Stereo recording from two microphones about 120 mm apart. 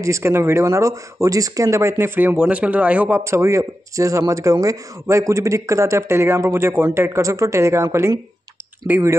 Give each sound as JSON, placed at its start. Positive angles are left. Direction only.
{"t": 0.0, "sound": "speech", "side_deg": -20}